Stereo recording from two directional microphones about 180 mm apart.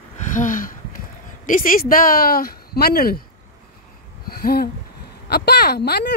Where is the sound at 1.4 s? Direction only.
50° left (ahead or behind).